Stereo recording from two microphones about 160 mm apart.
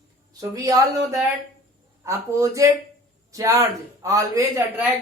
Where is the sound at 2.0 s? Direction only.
20° right (ahead or behind).